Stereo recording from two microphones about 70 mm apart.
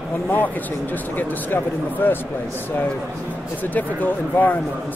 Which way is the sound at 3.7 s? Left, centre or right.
Left.